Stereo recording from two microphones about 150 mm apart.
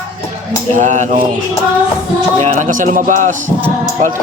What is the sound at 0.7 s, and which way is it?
Speech, 55° right (ahead or behind).